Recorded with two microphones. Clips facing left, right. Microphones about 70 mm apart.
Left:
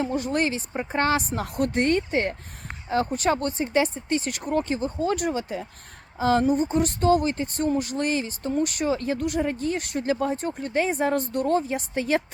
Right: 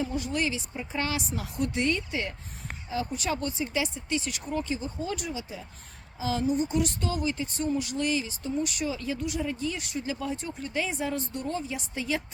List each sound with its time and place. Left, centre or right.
0.0 s speech: left